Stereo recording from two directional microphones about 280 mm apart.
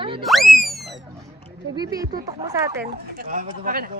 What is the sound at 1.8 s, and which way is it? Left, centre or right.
Speech, centre.